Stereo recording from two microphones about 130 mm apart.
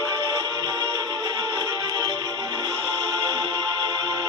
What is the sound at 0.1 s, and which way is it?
Music, 30° right (ahead or behind).